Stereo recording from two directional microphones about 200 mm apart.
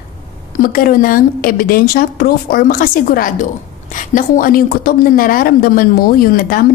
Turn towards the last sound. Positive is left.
turn(degrees=45)  # may be behind; listen again after turning